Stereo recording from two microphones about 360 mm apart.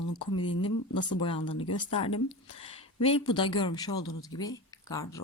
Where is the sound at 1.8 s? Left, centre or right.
Centre.